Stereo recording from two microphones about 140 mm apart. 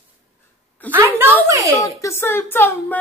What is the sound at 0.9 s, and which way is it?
Speech, 15° right (ahead or behind).